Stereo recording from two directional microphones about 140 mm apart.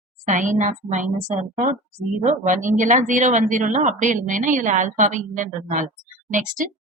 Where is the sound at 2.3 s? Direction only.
65° right (ahead or behind).